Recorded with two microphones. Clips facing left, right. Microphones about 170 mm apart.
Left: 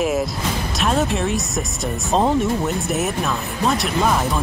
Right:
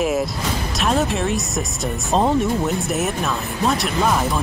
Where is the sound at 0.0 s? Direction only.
Centre (ahead or behind).